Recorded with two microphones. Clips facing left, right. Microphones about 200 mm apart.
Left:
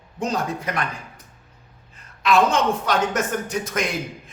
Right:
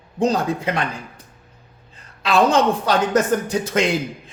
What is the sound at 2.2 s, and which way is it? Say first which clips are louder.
Speech: right 2 dB; 30° right (ahead or behind).